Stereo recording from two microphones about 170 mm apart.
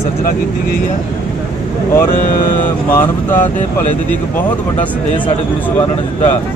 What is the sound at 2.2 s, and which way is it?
Speech, 55° left (ahead or behind).